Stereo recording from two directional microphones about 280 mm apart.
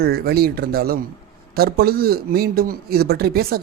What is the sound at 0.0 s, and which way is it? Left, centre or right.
Speech, right.